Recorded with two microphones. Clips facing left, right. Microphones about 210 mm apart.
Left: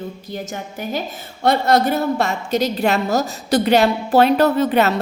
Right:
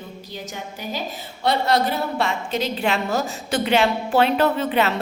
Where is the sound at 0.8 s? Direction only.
50° left (ahead or behind).